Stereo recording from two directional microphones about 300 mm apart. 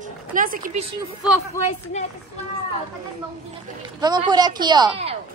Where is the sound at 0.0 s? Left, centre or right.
Right.